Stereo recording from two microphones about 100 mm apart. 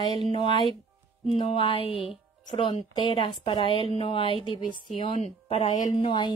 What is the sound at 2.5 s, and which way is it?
Speech, 50° left (ahead or behind).